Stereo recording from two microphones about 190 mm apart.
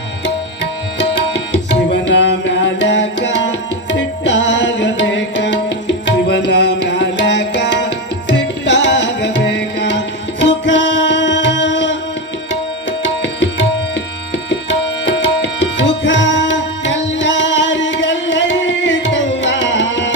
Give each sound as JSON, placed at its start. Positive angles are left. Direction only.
{"t": 0.9, "sound": "tabla", "side_deg": 65}
{"t": 10.4, "sound": "music", "side_deg": 70}
{"t": 13.0, "sound": "tabla", "side_deg": 70}
{"t": 15.8, "sound": "music", "side_deg": 70}